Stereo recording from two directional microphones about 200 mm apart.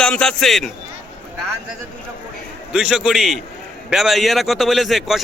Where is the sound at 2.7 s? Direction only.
5° right (ahead or behind).